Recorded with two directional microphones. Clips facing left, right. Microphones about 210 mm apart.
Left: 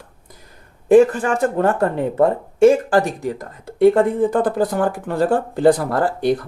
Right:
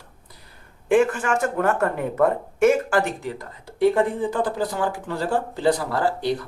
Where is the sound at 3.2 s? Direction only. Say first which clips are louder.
Left 6 dB; 45° left (ahead or behind).